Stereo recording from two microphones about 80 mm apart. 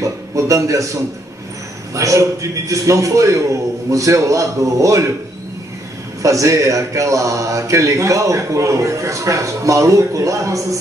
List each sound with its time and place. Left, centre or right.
0.0 s a sound: right
2.0 s speech: right
6.2 s speech: right